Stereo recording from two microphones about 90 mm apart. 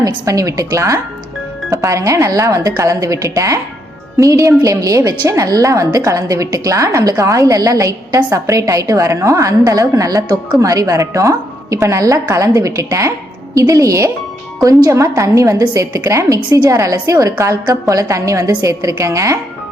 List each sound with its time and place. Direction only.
0.0 s a woman's voice: 35° right (ahead or behind)